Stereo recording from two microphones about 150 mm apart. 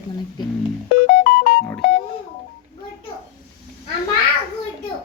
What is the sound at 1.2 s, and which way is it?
Music, 75° left (ahead or behind).